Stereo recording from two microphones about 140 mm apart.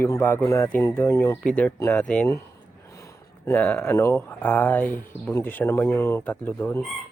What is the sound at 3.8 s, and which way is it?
Speech, 20° left (ahead or behind).